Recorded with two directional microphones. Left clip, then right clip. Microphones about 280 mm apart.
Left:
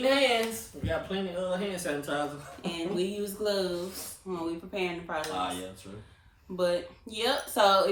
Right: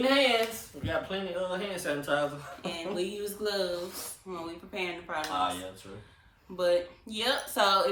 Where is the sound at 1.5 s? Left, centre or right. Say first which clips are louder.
Left 1 dB; centre.